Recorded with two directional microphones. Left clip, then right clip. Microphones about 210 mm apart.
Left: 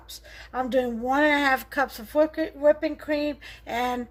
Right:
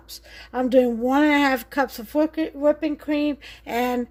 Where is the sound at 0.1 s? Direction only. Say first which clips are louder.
Right 3 dB; 40° right (ahead or behind).